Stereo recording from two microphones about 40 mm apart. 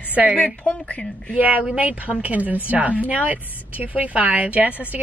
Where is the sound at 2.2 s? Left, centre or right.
Right.